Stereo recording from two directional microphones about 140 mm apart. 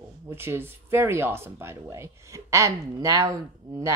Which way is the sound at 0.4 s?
15° right (ahead or behind).